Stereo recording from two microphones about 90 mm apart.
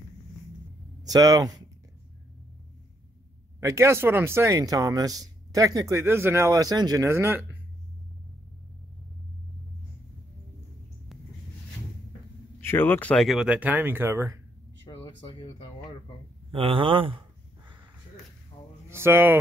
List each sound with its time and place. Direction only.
1.0 s speech: 45° right (ahead or behind)
3.6 s speech: 30° right (ahead or behind)
6.6 s speech: 45° right (ahead or behind); by 7.4 s 30° right (ahead or behind)
12.5 s speech: 25° left (ahead or behind)
13.1 s speech: centre (ahead or behind)
13.5 s speech: 15° right (ahead or behind); by 14.4 s 35° right (ahead or behind)
16.5 s speech: 80° right
18.9 s speech: 30° right (ahead or behind)